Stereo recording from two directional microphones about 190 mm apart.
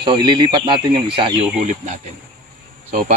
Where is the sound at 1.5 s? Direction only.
40° right (ahead or behind).